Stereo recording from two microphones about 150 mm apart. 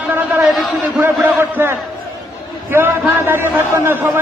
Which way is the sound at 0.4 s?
Centre (ahead or behind).